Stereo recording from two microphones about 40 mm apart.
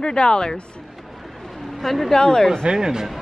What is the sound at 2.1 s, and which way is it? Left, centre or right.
Speech, centre.